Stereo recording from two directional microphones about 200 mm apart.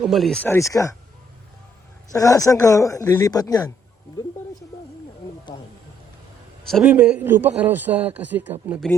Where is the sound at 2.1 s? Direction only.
15° left (ahead or behind).